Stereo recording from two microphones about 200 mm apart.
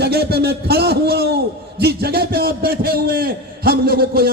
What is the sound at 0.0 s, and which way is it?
A man's voice, 55° right (ahead or behind).